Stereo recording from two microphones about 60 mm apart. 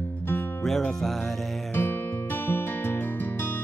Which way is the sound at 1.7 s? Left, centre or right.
Left.